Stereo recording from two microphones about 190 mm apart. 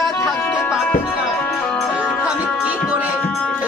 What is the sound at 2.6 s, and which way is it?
Music, 5° right (ahead or behind).